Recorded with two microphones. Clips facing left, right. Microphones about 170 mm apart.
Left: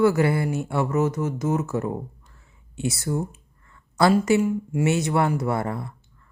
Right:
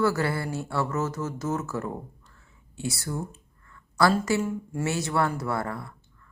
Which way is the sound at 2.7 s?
20° left (ahead or behind).